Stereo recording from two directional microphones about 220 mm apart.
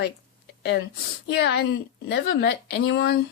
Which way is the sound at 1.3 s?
50° left (ahead or behind).